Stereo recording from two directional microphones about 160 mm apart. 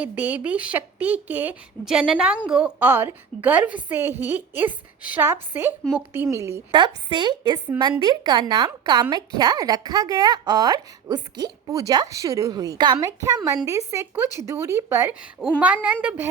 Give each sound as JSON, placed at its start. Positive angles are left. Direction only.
{"t": 0.0, "sound": "speech", "side_deg": -10}
{"t": 6.7, "sound": "a woman's voice", "side_deg": -30}